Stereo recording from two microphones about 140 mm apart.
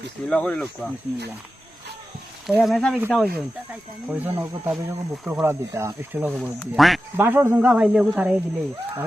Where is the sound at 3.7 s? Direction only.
10° right (ahead or behind).